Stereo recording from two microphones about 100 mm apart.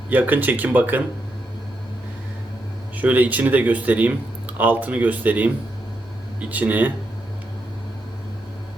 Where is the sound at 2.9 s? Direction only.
15° right (ahead or behind).